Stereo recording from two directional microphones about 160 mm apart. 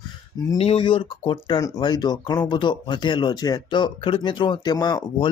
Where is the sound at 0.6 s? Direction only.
35° left (ahead or behind).